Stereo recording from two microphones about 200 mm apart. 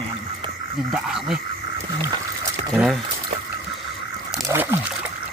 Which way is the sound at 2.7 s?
Centre (ahead or behind).